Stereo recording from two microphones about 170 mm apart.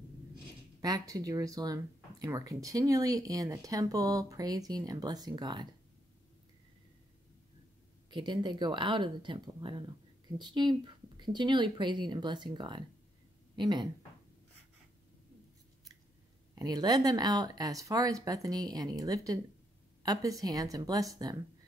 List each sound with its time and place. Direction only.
0.7 s speech: 20° right (ahead or behind)
8.1 s speech: 25° right (ahead or behind)
16.5 s speech: 25° right (ahead or behind)